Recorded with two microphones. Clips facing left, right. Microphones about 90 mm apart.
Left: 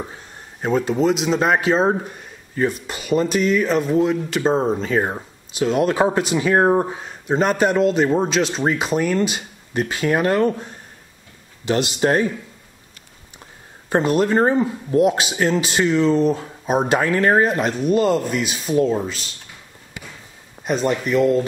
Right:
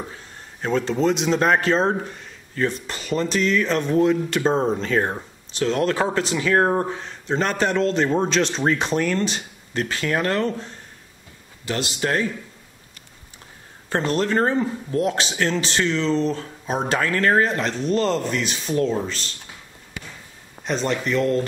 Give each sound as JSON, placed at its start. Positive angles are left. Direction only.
{"t": 0.6, "sound": "speech", "side_deg": 10}
{"t": 13.8, "sound": "speech", "side_deg": 15}
{"t": 20.6, "sound": "speech", "side_deg": 5}